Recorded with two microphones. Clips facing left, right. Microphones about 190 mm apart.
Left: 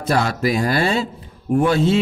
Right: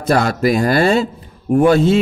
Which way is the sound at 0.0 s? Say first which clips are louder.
Right 4 dB; 50° right (ahead or behind).